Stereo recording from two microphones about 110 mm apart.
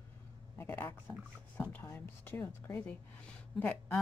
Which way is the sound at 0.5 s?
20° left (ahead or behind).